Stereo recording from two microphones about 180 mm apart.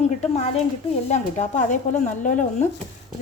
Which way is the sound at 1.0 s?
40° left (ahead or behind).